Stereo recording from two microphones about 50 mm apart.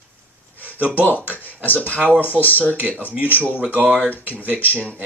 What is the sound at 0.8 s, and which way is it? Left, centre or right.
Speech, right.